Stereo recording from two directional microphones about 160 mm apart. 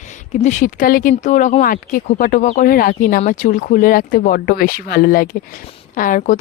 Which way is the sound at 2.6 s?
65° left (ahead or behind).